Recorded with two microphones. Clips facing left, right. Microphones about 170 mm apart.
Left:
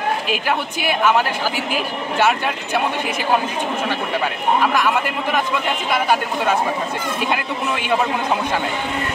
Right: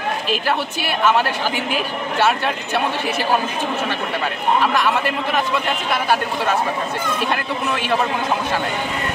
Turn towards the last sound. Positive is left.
turn(degrees=15)  # may be behind; listen again after turning